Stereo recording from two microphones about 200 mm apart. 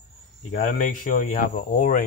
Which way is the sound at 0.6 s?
40° left (ahead or behind).